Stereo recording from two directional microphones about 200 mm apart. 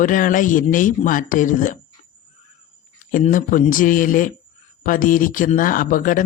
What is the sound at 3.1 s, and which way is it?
Speech, 40° left (ahead or behind).